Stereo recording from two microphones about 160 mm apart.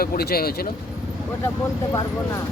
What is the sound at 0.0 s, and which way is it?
Speech, 75° left (ahead or behind).